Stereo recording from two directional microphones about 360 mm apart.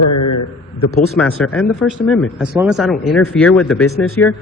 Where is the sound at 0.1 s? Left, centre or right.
Left.